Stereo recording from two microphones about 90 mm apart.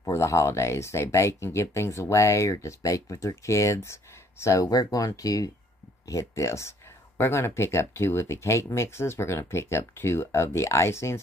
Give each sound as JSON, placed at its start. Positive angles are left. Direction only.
{"t": 0.0, "sound": "speech", "side_deg": 35}